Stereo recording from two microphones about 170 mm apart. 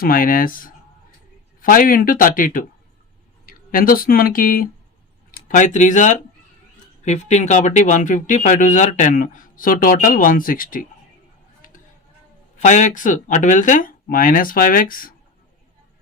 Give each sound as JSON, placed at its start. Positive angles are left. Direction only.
{"t": 0.0, "sound": "speech", "side_deg": 55}
{"t": 12.5, "sound": "speech", "side_deg": 45}